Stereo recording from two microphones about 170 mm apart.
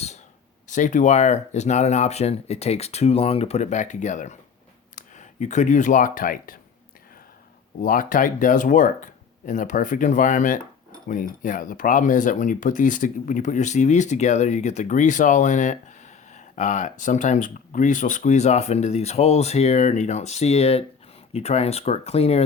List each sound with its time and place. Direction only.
0.7 s speech: 45° left (ahead or behind)
7.8 s speech: 55° left (ahead or behind); by 22.4 s 35° left (ahead or behind)